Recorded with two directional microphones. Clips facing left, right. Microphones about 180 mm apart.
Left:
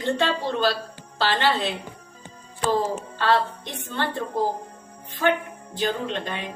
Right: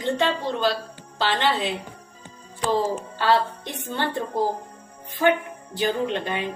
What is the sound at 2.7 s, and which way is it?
A woman's voice, 15° right (ahead or behind).